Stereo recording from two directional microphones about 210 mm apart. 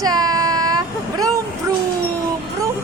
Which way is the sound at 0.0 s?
20° right (ahead or behind).